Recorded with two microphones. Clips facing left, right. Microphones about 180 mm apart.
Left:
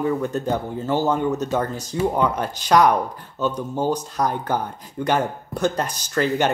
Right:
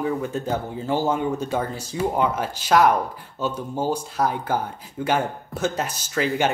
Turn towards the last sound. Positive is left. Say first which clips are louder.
# left 2 dB
turn(degrees=-5)  # may be behind; listen again after turning